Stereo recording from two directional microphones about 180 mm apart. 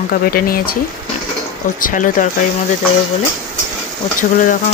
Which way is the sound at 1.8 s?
45° left (ahead or behind).